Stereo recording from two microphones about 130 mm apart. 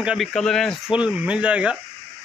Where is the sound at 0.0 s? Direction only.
10° right (ahead or behind).